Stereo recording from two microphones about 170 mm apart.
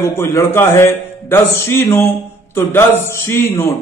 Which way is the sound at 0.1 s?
15° left (ahead or behind).